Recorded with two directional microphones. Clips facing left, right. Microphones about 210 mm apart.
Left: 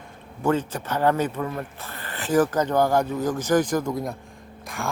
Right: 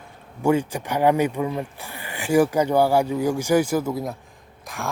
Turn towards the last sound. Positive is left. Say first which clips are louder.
# left 1 dB
turn(degrees=0)  # may be behind; listen again after turning